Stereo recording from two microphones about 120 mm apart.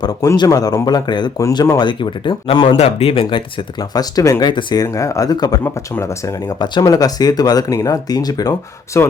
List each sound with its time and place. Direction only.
0.0 s speech: 25° left (ahead or behind); by 2.7 s 45° left (ahead or behind)
2.7 s speech: 55° left (ahead or behind); by 9.0 s 25° left (ahead or behind)